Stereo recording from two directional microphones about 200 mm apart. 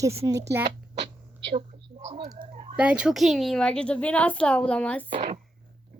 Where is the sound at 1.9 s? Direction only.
30° right (ahead or behind).